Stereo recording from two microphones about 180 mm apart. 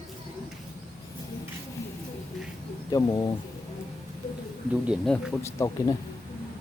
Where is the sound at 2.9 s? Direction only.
20° left (ahead or behind).